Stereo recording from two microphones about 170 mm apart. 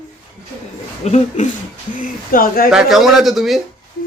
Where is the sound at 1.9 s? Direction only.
55° left (ahead or behind).